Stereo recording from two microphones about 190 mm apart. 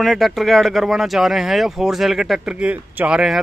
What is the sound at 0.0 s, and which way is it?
Speech, centre (ahead or behind).